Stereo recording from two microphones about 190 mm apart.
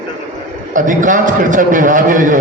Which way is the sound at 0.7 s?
45° right (ahead or behind).